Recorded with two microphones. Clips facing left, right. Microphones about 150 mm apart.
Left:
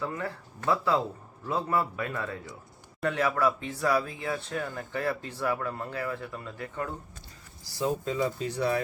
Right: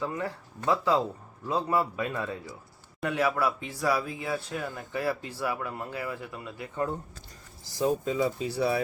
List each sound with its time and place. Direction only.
0.0 s a man's voice: 15° right (ahead or behind)
7.7 s speech: 15° right (ahead or behind)